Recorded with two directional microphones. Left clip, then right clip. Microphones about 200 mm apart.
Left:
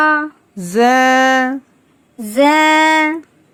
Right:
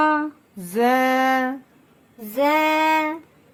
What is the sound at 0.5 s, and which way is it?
Female singing, 30° left (ahead or behind).